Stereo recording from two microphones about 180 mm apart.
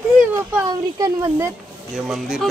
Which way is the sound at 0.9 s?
20° right (ahead or behind).